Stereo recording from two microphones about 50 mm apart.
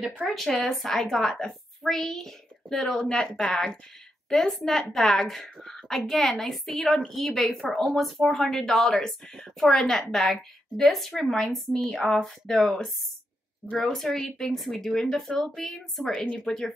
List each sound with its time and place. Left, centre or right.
0.3 s a woman's voice: centre
3.2 s a woman's voice: centre